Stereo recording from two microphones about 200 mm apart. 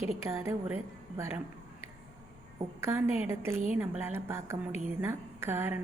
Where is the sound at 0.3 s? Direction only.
15° right (ahead or behind).